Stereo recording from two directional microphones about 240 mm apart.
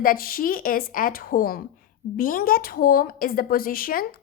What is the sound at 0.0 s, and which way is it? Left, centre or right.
A woman's voice, left.